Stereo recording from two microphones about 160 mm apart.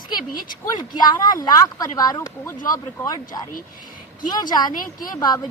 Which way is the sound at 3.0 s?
10° left (ahead or behind).